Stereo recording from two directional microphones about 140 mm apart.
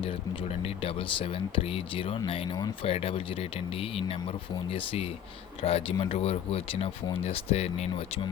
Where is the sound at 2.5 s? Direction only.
30° left (ahead or behind).